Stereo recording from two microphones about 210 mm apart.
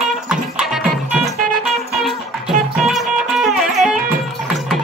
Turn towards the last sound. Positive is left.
turn(degrees=-5)  # may be behind; listen again after turning